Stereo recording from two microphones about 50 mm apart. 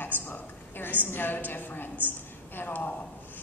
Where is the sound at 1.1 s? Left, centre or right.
Left.